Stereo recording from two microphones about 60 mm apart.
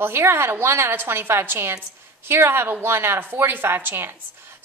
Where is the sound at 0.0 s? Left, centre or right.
Right.